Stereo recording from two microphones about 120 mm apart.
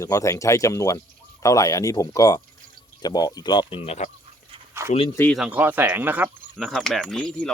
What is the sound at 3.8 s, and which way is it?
Speech, 65° left (ahead or behind).